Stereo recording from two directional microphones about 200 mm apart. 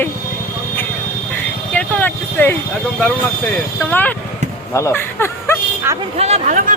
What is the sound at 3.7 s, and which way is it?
Speech, 10° left (ahead or behind).